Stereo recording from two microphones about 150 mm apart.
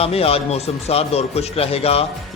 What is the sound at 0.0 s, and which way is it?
A man's voice, 40° left (ahead or behind).